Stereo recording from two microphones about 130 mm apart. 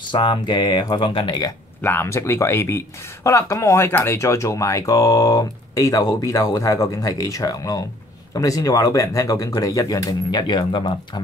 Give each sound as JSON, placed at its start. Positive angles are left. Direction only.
{"t": 0.1, "sound": "speech", "side_deg": 40}
{"t": 1.8, "sound": "speech", "side_deg": 15}
{"t": 10.4, "sound": "speech", "side_deg": 35}